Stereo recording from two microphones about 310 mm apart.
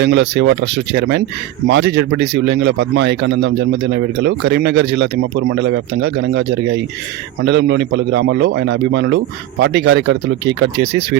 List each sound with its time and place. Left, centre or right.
0.0 s speech: right